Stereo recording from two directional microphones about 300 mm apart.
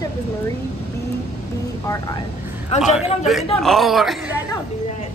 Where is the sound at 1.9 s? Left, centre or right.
Centre.